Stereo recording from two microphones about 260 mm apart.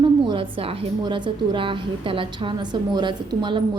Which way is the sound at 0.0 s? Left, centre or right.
Centre.